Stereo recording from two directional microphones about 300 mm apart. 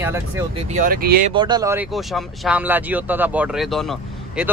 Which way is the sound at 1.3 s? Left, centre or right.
Centre.